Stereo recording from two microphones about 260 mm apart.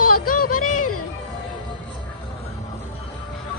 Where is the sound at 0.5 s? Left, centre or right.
Left.